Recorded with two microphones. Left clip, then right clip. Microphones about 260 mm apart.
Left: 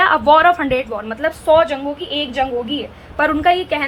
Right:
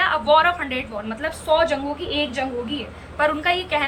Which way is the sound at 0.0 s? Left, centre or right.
Centre.